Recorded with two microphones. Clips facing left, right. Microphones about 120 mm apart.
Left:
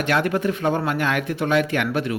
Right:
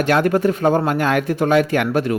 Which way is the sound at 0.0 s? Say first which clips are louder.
Right 5 dB; 40° right (ahead or behind).